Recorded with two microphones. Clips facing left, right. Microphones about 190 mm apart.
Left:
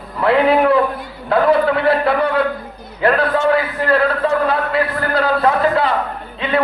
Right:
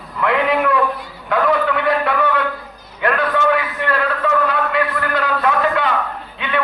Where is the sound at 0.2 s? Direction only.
35° left (ahead or behind).